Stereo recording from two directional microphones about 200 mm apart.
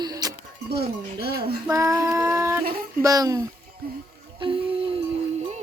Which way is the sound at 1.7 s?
15° right (ahead or behind).